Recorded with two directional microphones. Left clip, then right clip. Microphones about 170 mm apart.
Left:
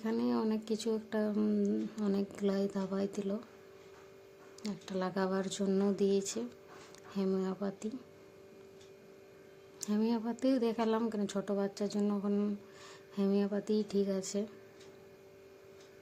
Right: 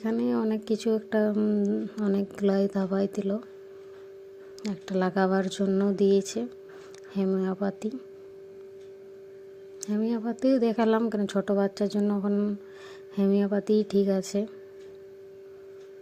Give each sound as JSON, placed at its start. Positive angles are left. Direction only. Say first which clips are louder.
{"t": 0.0, "sound": "speech", "louder": "right 6 dB", "side_deg": -30}
{"t": 4.6, "sound": "speech", "louder": "right 9 dB", "side_deg": -35}
{"t": 9.8, "sound": "speech", "louder": "right 5 dB", "side_deg": -20}
{"t": 13.1, "sound": "speech", "louder": "right 8 dB", "side_deg": -35}